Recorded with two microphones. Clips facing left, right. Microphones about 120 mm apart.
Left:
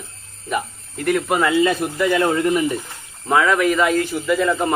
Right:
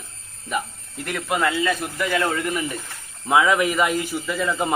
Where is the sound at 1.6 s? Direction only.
25° left (ahead or behind).